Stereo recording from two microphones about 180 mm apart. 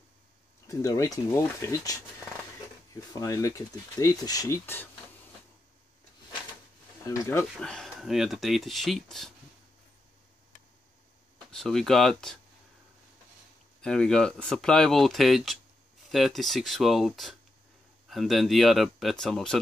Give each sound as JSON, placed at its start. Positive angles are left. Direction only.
{"t": 0.7, "sound": "speech", "side_deg": 20}
{"t": 7.0, "sound": "speech", "side_deg": 15}
{"t": 7.5, "sound": "speech", "side_deg": 5}
{"t": 11.5, "sound": "speech", "side_deg": 0}
{"t": 13.7, "sound": "speech", "side_deg": 5}